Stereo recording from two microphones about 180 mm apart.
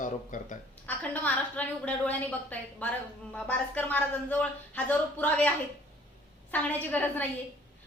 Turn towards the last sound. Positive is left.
turn(degrees=10)  # may be behind; listen again after turning